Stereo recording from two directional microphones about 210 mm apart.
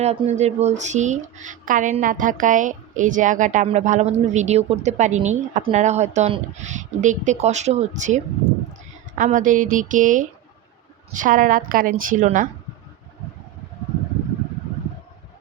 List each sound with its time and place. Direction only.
0.0 s speech: 30° right (ahead or behind)